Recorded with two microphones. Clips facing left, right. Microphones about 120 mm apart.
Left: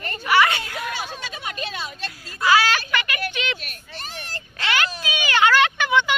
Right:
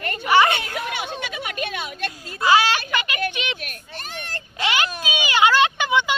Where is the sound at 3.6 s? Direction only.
50° right (ahead or behind).